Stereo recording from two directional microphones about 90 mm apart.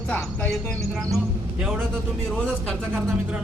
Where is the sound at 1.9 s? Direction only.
10° left (ahead or behind).